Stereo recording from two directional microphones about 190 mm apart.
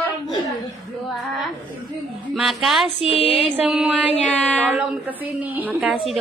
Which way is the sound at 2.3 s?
Centre (ahead or behind).